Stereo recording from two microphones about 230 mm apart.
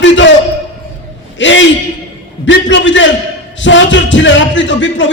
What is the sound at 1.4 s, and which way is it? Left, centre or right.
A man's voice, left.